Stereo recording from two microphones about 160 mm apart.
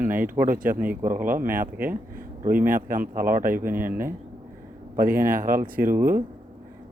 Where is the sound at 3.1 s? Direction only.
60° right (ahead or behind).